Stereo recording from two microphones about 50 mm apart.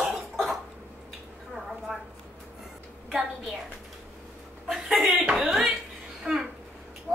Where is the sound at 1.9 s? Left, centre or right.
Centre.